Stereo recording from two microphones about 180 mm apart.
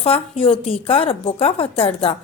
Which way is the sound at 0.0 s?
30° left (ahead or behind).